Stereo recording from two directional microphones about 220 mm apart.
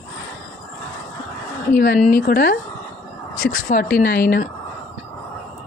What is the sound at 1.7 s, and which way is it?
Speech, 40° left (ahead or behind).